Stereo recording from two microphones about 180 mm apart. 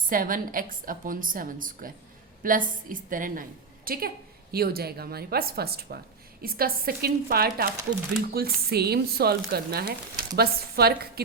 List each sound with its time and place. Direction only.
0.1 s a woman's voice: 50° right (ahead or behind)